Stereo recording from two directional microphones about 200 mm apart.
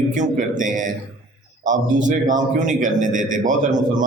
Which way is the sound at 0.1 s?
40° right (ahead or behind).